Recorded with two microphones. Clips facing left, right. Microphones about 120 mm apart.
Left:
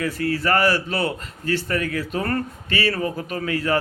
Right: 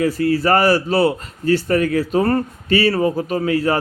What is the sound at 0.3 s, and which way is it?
A man's voice, 40° right (ahead or behind).